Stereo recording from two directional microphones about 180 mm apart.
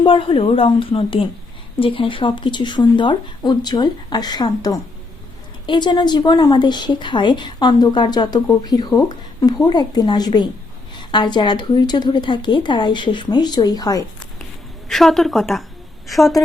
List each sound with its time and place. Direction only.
0.0 s a woman's voice: 30° left (ahead or behind)
14.8 s a woman's voice: centre (ahead or behind)